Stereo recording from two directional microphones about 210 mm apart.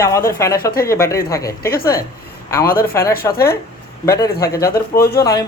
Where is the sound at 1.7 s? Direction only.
45° left (ahead or behind).